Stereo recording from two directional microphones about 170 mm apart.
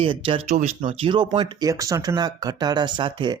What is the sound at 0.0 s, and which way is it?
Speech, 30° right (ahead or behind).